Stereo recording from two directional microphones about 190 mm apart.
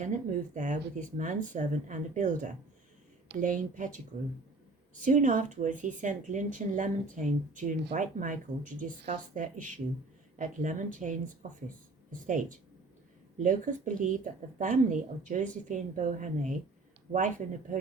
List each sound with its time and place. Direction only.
0.0 s speech: 40° right (ahead or behind)
5.0 s speech: 45° right (ahead or behind)